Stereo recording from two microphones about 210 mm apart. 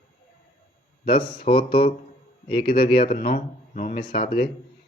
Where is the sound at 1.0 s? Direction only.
45° left (ahead or behind).